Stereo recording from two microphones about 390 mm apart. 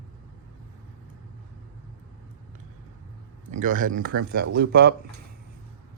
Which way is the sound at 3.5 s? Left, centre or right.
Centre.